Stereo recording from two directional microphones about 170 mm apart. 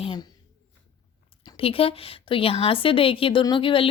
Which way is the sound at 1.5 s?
35° left (ahead or behind).